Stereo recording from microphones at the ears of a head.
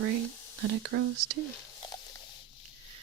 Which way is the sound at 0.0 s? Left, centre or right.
Right.